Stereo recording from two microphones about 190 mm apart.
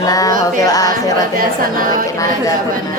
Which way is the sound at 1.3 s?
50° right (ahead or behind).